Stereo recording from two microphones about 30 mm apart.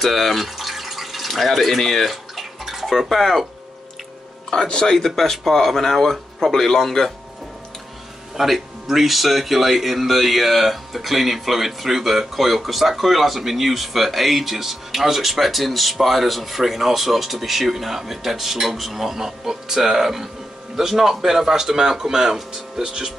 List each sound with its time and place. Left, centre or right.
0.0 s speech: centre
2.0 s bathtub: centre
2.9 s speech: centre
4.6 s speech: left
4.9 s speech: centre
8.4 s speech: centre